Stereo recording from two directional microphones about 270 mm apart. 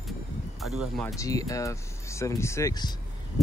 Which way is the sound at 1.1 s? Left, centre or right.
Centre.